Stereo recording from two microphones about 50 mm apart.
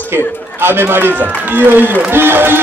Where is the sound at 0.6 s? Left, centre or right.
Right.